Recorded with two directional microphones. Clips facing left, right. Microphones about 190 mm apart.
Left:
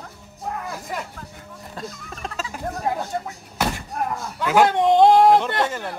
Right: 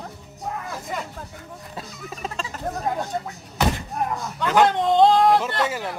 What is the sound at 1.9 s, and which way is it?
Music, centre (ahead or behind).